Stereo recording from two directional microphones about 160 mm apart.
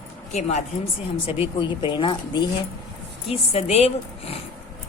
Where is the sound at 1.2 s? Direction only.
30° left (ahead or behind).